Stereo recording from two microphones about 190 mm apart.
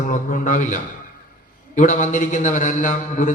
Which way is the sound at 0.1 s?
40° left (ahead or behind).